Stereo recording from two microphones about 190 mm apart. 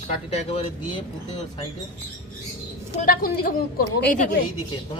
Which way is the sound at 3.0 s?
50° left (ahead or behind).